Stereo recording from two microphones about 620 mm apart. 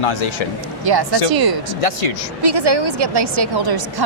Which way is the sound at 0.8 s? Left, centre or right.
Right.